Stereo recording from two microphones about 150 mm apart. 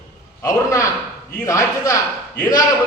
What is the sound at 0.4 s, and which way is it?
A man's voice, 20° left (ahead or behind).